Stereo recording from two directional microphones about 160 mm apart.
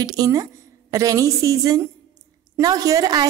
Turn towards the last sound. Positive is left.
turn(degrees=-25)  # may be behind; listen again after turning